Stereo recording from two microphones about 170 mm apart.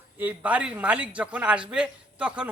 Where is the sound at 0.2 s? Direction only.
10° right (ahead or behind).